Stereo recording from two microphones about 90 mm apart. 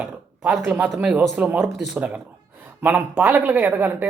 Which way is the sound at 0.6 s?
10° right (ahead or behind).